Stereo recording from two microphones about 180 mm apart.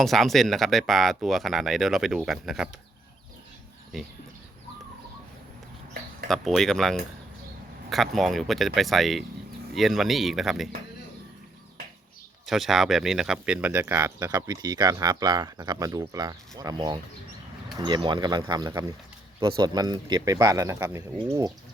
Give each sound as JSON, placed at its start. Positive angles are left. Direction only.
{"t": 0.0, "sound": "speech", "side_deg": 0}
{"t": 3.9, "sound": "speech", "side_deg": 0}
{"t": 6.2, "sound": "speech", "side_deg": 0}
{"t": 12.5, "sound": "speech", "side_deg": 0}